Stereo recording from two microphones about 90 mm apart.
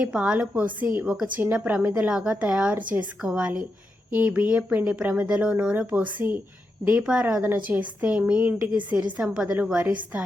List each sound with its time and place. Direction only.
0.0 s a woman's voice: 10° right (ahead or behind)